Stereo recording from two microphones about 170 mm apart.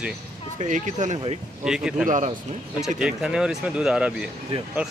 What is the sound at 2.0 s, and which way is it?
Speech, 45° right (ahead or behind).